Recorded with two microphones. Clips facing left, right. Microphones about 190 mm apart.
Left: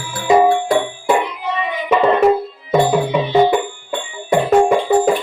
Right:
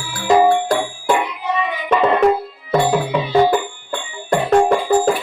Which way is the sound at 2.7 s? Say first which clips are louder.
Left 2 dB; 10° left (ahead or behind).